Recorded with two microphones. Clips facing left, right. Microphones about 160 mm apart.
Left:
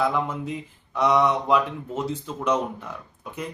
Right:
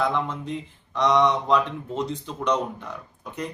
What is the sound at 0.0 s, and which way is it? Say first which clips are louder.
Speech: left 1 dB; 5° left (ahead or behind).